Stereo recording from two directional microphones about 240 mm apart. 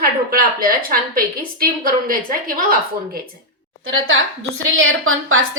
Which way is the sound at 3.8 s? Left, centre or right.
Right.